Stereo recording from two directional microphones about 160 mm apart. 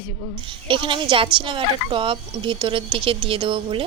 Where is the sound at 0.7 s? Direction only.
30° right (ahead or behind).